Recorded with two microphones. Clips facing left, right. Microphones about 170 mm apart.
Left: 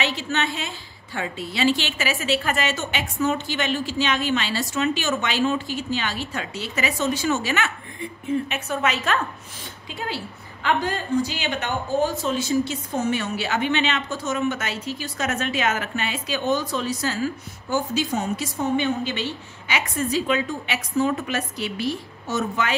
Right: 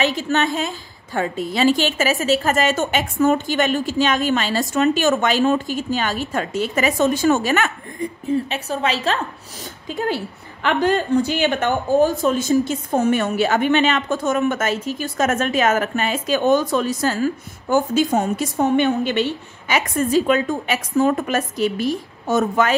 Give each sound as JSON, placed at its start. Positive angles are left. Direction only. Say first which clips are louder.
{"t": 0.0, "sound": "a woman's voice", "louder": "right 6 dB", "side_deg": -45}
{"t": 9.8, "sound": "a woman's voice", "louder": "right 8 dB", "side_deg": -50}
{"t": 19.7, "sound": "a woman's voice", "louder": "right 6 dB", "side_deg": -45}